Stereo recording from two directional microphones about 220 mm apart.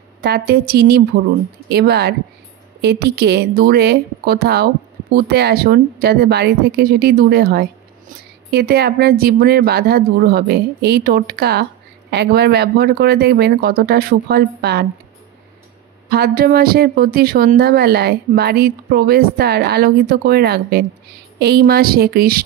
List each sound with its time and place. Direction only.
0.2 s speech: 45° right (ahead or behind)
16.1 s speech: 45° right (ahead or behind)